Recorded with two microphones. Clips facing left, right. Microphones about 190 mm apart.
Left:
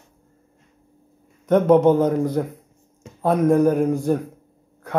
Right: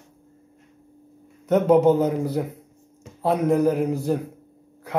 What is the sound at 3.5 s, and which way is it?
Speech, 5° right (ahead or behind).